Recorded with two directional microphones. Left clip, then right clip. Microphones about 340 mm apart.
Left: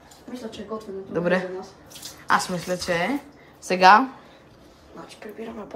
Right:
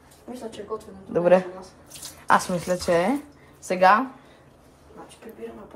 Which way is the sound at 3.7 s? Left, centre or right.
Centre.